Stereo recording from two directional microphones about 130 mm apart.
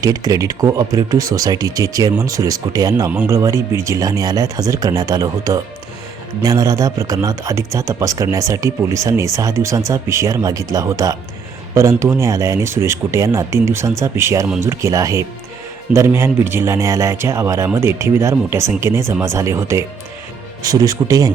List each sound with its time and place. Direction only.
0.0 s speech: 30° right (ahead or behind)